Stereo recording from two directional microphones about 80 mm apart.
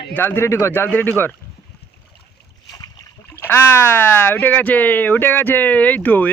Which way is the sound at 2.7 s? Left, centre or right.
Left.